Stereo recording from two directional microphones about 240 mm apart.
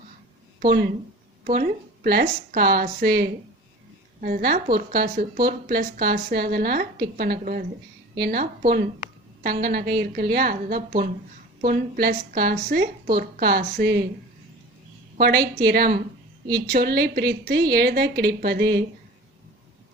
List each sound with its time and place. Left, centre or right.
0.6 s a woman's voice: right
15.6 s a woman's voice: right